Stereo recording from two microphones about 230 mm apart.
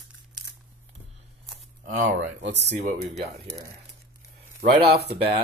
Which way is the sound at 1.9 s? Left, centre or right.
Right.